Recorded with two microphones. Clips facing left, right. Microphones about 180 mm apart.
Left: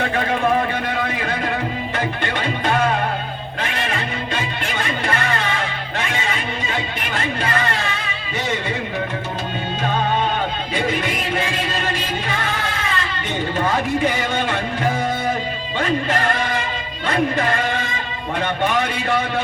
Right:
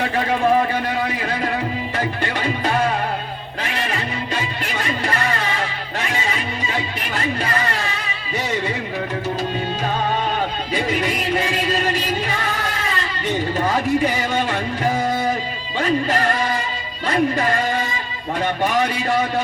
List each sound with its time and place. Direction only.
2.0 s music: 35° right (ahead or behind)
10.8 s music: 35° right (ahead or behind)
17.1 s a man's voice: 35° right (ahead or behind)